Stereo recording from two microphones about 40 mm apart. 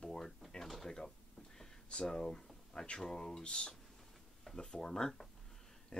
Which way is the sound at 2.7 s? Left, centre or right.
Left.